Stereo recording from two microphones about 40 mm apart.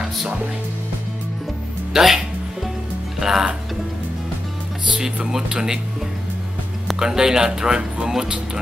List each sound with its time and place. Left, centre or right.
2.0 s music: centre
3.2 s speech: centre
4.9 s speech: centre
7.0 s speech: centre